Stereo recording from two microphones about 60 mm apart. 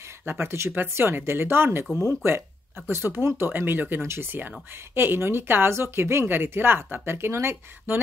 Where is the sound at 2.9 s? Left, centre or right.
Right.